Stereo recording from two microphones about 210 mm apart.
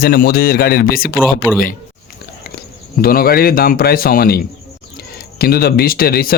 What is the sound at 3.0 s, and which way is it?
Speech, 45° left (ahead or behind).